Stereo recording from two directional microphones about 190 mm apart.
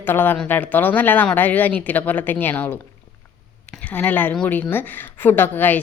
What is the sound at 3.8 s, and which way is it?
A woman's voice, 10° left (ahead or behind).